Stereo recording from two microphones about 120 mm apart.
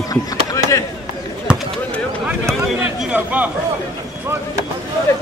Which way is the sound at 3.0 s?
10° right (ahead or behind).